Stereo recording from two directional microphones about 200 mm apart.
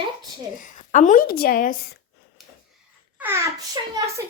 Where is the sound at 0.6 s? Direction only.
40° left (ahead or behind).